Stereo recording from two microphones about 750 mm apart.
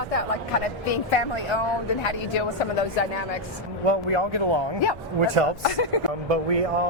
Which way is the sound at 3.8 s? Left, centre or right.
Right.